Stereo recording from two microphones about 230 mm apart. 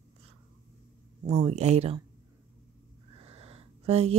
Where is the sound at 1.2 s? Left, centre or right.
Right.